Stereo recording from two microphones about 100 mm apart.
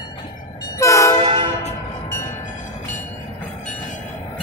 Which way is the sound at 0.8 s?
30° left (ahead or behind).